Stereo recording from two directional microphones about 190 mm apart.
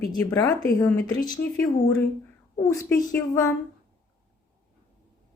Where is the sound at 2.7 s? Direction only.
15° left (ahead or behind).